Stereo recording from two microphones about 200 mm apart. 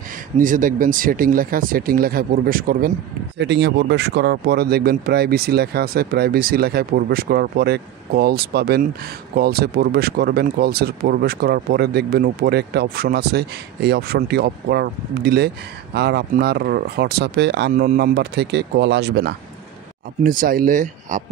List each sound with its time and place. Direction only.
0.4 s speech: 40° right (ahead or behind)
3.3 s speech: 60° right (ahead or behind)
20.2 s speech: 45° right (ahead or behind)